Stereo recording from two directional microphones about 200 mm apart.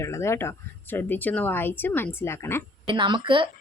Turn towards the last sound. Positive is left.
turn(degrees=-25)  # may be behind; listen again after turning